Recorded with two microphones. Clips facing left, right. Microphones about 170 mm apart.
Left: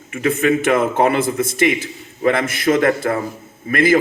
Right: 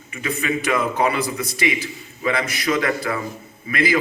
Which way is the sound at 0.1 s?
50° left (ahead or behind).